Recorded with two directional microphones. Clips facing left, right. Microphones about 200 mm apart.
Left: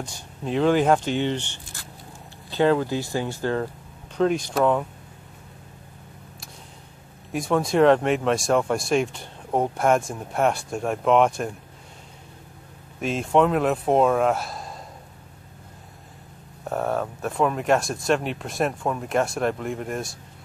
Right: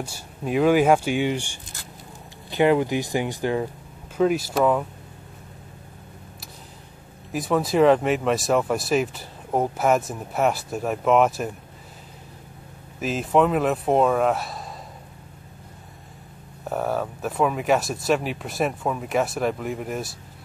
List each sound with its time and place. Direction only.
0.0 s speech: 10° right (ahead or behind)
7.3 s speech: centre (ahead or behind)
13.0 s speech: centre (ahead or behind)
16.6 s speech: centre (ahead or behind)